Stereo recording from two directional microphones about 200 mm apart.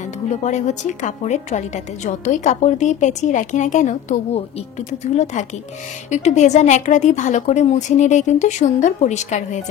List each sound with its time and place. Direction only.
0.4 s speech: 35° left (ahead or behind)